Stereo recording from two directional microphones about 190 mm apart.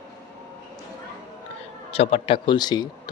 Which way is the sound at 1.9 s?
30° left (ahead or behind).